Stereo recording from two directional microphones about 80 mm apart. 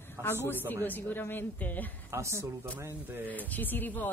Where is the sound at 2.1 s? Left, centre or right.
Right.